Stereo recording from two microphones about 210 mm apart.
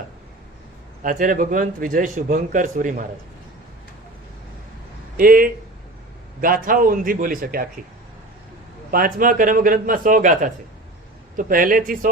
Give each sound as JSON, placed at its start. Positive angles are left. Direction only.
{"t": 1.0, "sound": "a man's voice", "side_deg": -40}
{"t": 5.1, "sound": "speech", "side_deg": -45}
{"t": 8.9, "sound": "a man's voice", "side_deg": -45}